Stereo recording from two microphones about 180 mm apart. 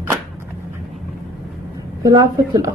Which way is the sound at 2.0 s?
20° right (ahead or behind).